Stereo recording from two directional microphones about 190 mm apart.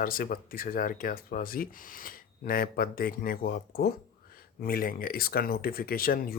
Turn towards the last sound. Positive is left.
turn(degrees=50)  # may be behind; listen again after turning